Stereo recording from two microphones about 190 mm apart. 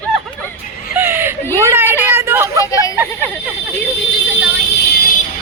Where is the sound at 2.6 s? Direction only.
15° left (ahead or behind).